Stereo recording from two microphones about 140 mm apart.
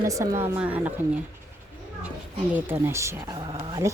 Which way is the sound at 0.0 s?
20° right (ahead or behind).